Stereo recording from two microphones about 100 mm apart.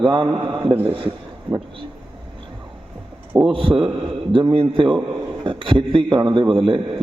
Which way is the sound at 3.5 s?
65° right (ahead or behind).